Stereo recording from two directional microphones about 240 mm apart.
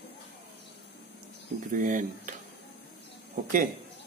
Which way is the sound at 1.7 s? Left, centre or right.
Right.